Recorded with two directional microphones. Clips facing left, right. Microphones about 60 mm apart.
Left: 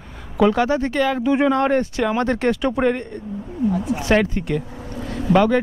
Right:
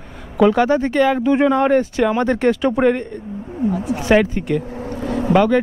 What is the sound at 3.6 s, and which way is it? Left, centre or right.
Speech, right.